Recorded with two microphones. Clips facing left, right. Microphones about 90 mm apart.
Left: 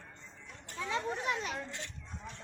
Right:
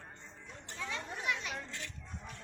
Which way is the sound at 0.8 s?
25° left (ahead or behind).